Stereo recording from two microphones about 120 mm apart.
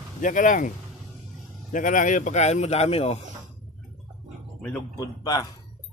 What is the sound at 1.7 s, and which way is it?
Speech, 90° left.